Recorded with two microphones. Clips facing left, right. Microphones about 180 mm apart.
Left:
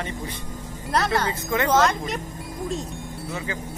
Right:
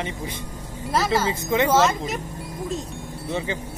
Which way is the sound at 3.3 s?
25° right (ahead or behind).